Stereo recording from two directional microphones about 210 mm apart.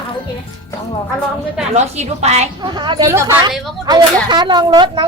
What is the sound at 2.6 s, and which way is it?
Speech, 20° right (ahead or behind).